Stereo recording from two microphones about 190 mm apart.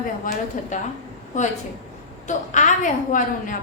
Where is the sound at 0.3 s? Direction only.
45° left (ahead or behind).